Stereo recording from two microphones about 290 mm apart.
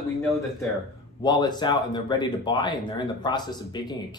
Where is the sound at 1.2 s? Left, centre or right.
Centre.